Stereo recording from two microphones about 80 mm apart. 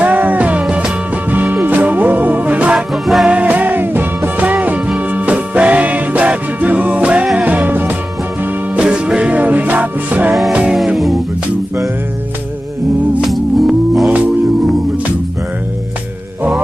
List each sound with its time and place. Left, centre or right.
0.0 s music: right
2.9 s music: centre
3.3 s music: centre
10.3 s music: centre
13.2 s music: centre